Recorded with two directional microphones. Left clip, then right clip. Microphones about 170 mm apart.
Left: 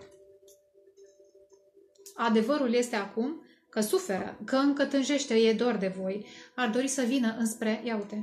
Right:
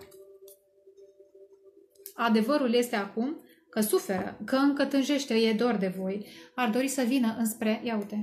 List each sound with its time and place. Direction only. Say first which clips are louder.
2.1 s a woman's voice: right 1 dB; 45° right (ahead or behind)